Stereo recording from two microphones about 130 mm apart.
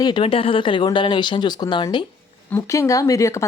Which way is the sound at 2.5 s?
25° left (ahead or behind).